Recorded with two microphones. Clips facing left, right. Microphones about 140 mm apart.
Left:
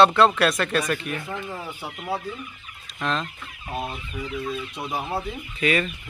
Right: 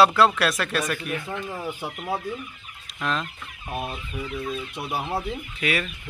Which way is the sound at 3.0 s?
Centre (ahead or behind).